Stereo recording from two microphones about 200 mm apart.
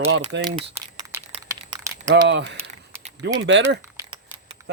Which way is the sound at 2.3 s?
65° right (ahead or behind).